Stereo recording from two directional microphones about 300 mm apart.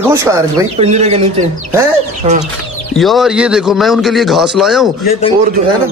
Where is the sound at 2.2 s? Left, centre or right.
Right.